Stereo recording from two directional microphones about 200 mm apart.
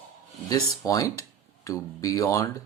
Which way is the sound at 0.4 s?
20° left (ahead or behind).